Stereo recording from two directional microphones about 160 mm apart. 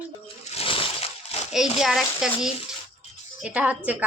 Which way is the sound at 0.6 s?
35° left (ahead or behind).